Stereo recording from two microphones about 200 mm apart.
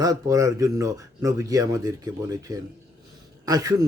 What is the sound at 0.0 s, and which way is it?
Speech, 15° right (ahead or behind).